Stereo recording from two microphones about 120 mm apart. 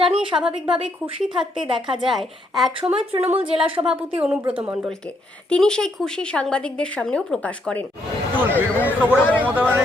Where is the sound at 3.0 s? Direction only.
55° right (ahead or behind).